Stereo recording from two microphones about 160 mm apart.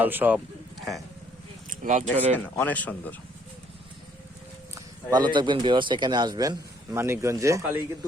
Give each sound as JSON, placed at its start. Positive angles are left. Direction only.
{"t": 0.0, "sound": "a man's voice", "side_deg": -10}
{"t": 1.8, "sound": "speech", "side_deg": -50}
{"t": 2.6, "sound": "speech", "side_deg": 10}
{"t": 4.7, "sound": "speech", "side_deg": -25}